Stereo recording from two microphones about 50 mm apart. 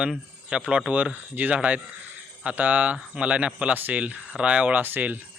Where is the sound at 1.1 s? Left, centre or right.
Right.